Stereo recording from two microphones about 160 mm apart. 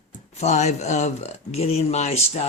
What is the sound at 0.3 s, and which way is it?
Speech, 45° left (ahead or behind).